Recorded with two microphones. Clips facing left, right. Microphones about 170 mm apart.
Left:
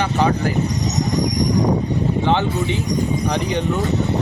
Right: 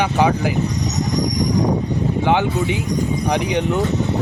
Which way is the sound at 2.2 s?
10° right (ahead or behind).